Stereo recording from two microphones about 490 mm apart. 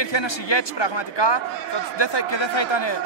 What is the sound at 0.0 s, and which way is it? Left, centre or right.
A man's voice, left.